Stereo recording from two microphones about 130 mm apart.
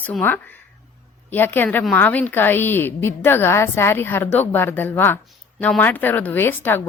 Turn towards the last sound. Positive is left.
turn(degrees=15)  # may be behind; listen again after turning